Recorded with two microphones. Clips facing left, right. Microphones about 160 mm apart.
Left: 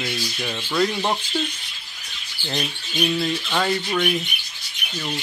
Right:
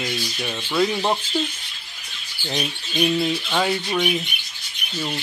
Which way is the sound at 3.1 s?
10° right (ahead or behind).